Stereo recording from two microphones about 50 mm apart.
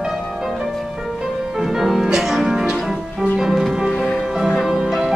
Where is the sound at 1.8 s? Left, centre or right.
Centre.